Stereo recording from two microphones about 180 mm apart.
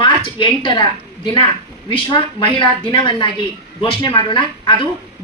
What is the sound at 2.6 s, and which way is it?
A woman's voice, 25° left (ahead or behind).